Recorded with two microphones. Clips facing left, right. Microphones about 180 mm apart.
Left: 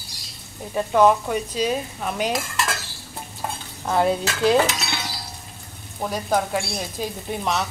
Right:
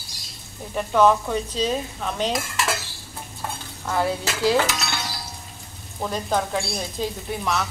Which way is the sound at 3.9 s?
20° left (ahead or behind).